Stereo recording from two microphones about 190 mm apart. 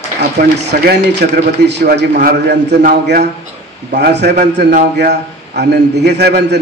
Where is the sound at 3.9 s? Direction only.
65° right (ahead or behind).